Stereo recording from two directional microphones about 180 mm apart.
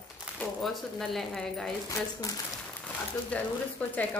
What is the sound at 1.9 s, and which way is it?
Speech, 20° left (ahead or behind).